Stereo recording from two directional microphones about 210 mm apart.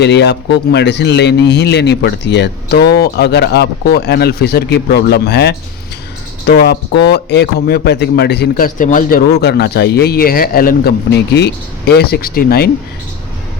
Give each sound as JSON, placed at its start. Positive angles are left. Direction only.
{"t": 0.0, "sound": "a man's voice", "side_deg": 55}